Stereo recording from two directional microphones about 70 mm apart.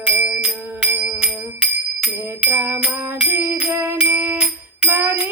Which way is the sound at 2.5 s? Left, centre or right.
Right.